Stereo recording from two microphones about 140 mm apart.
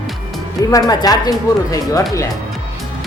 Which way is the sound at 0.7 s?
25° left (ahead or behind).